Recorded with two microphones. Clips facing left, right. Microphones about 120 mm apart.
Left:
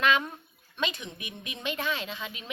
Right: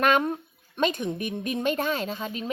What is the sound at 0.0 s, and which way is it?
A woman's voice, 45° right (ahead or behind).